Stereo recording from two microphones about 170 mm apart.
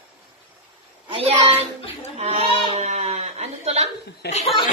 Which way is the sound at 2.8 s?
40° right (ahead or behind).